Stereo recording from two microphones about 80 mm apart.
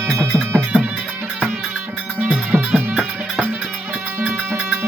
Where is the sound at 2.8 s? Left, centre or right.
Centre.